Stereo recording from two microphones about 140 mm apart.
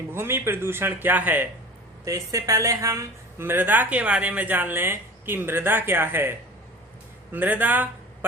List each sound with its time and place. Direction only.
0.1 s speech: 15° right (ahead or behind)
2.0 s speech: 25° right (ahead or behind)
7.3 s speech: 15° right (ahead or behind)